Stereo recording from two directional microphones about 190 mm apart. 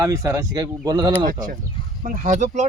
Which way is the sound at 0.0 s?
15° right (ahead or behind).